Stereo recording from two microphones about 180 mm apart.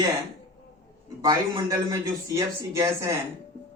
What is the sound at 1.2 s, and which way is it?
Speech, 20° right (ahead or behind).